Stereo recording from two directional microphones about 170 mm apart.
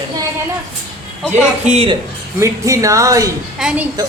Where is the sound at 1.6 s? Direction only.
40° right (ahead or behind).